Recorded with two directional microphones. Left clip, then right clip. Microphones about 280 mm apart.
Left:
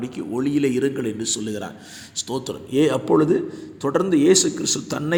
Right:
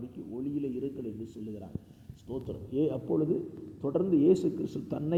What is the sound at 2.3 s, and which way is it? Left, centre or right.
A man's voice, left.